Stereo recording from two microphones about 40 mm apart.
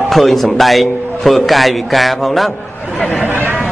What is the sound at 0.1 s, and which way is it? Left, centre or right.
Speech, centre.